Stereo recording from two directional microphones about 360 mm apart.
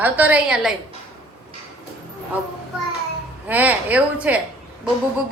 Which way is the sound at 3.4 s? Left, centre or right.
Centre.